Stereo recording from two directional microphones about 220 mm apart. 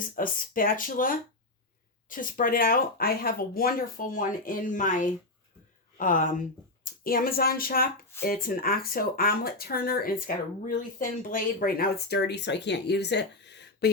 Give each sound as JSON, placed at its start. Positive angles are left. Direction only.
{"t": 0.2, "sound": "speech", "side_deg": 40}